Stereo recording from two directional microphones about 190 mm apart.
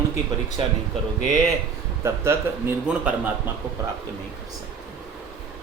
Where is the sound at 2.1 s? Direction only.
15° right (ahead or behind).